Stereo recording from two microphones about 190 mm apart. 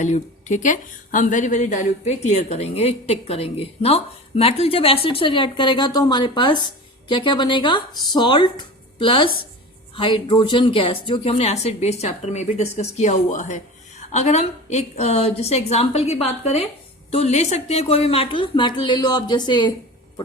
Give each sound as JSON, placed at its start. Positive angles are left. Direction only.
{"t": 0.0, "sound": "a woman's voice", "side_deg": 40}